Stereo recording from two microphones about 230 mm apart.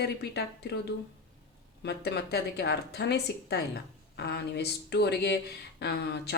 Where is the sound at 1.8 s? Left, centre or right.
Left.